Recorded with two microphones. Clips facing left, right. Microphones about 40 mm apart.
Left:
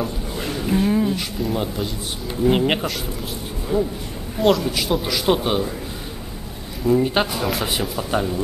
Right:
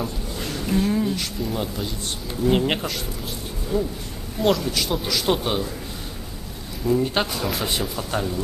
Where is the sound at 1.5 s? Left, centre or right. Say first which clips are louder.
Left 3 dB; centre.